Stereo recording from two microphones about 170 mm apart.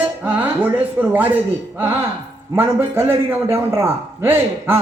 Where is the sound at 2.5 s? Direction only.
15° right (ahead or behind).